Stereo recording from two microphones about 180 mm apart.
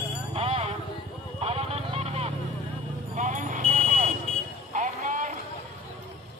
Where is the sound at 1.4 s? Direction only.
35° right (ahead or behind).